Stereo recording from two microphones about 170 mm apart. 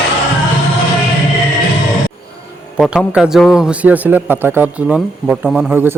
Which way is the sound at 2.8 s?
5° right (ahead or behind).